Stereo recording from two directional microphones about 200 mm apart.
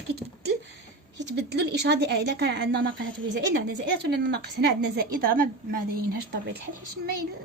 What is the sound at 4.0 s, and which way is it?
A woman's voice, 55° right (ahead or behind).